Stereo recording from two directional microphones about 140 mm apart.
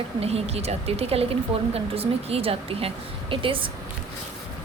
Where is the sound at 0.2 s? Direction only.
45° right (ahead or behind).